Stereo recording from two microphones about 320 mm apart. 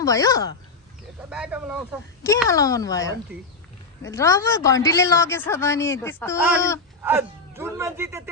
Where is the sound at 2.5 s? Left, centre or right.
Centre.